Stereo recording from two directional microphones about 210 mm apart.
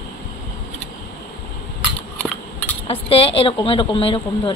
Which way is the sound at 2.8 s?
25° left (ahead or behind).